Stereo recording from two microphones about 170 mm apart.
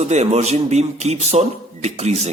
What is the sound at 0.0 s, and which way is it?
A man's voice, 40° right (ahead or behind).